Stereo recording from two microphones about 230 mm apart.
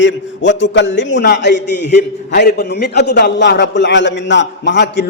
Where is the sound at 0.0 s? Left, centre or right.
Left.